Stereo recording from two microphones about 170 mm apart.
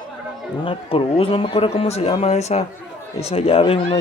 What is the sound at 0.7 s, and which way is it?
Speech, 35° left (ahead or behind).